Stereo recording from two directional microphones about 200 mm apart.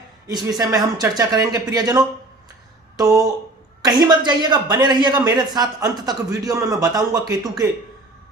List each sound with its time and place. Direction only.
0.4 s a man's voice: 20° right (ahead or behind)